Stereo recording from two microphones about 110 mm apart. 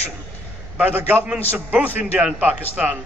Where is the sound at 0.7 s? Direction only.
15° right (ahead or behind).